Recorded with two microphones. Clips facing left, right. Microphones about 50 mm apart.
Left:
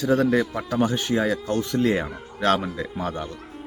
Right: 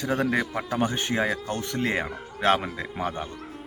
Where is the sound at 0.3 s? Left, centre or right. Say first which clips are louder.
Left 3 dB; right.